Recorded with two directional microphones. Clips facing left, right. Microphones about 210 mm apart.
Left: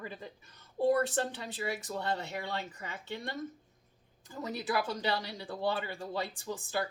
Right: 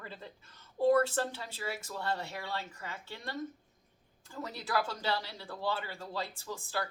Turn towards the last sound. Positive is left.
turn(degrees=20)  # may be behind; listen again after turning